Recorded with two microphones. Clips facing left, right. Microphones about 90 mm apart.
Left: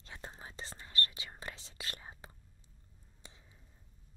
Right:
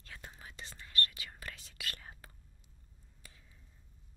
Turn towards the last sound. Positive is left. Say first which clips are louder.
# left 2 dB
turn(degrees=20)  # may be behind; listen again after turning